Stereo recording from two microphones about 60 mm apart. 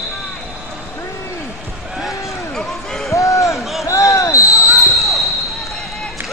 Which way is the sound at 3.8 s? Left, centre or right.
Left.